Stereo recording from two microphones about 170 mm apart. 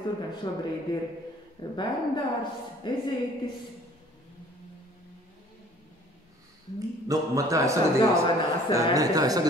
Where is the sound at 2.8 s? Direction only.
25° left (ahead or behind).